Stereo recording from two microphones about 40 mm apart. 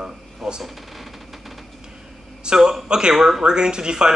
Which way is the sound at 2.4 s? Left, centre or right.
Centre.